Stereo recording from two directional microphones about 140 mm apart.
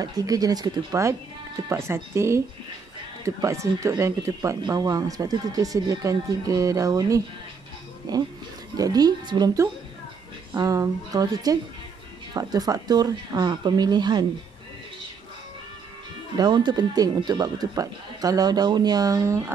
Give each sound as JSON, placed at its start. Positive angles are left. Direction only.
{"t": 0.0, "sound": "speech", "side_deg": -25}
{"t": 16.3, "sound": "speech", "side_deg": -30}